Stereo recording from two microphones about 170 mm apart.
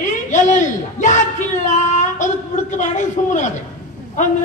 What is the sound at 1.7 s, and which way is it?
Child singing, 45° left (ahead or behind).